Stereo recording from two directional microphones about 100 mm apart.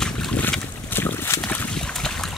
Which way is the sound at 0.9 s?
20° left (ahead or behind).